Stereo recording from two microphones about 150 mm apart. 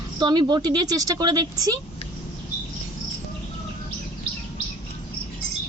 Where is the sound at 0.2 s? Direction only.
30° right (ahead or behind).